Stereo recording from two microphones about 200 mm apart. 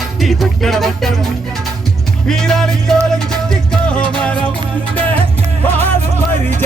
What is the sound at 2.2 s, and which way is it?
Music, centre (ahead or behind).